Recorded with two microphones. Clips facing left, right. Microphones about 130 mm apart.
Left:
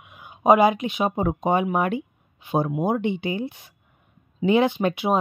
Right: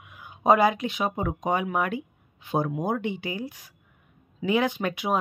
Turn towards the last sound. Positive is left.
turn(degrees=20)  # may be behind; listen again after turning